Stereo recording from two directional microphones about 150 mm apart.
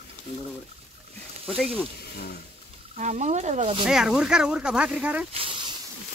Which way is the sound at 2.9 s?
50° right (ahead or behind).